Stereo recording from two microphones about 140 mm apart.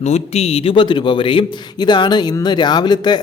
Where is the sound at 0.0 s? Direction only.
50° left (ahead or behind).